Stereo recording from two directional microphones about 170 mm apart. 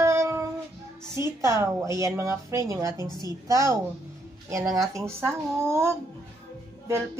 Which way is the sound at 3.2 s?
20° right (ahead or behind).